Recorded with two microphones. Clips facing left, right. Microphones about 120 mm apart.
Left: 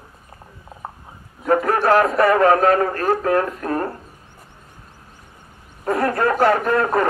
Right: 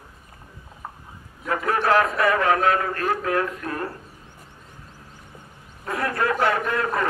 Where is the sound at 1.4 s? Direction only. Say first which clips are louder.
Left 5 dB; 30° left (ahead or behind).